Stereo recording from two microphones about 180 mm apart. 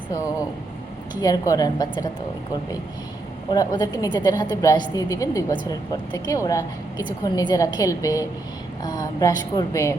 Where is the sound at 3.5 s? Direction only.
20° left (ahead or behind).